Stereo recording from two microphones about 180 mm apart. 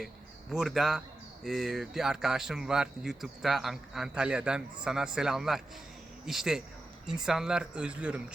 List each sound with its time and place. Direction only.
0.5 s speech: centre (ahead or behind)